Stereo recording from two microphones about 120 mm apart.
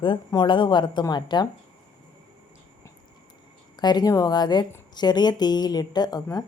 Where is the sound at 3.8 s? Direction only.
35° left (ahead or behind).